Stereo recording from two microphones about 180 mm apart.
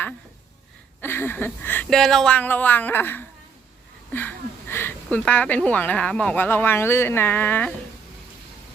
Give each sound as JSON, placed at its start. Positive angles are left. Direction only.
{"t": 1.0, "sound": "speech", "side_deg": 15}
{"t": 4.1, "sound": "a sound", "side_deg": 10}
{"t": 5.1, "sound": "speech", "side_deg": 10}